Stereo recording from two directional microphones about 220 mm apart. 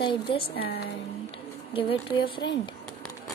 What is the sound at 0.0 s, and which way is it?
Speech, 25° left (ahead or behind).